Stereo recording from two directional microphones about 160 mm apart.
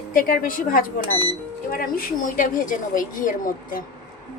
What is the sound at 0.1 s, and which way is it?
Speech, 60° left (ahead or behind).